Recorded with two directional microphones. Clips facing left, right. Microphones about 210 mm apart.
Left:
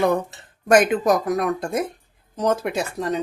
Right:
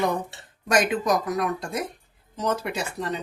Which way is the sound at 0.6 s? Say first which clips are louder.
Left 6 dB; 55° left (ahead or behind).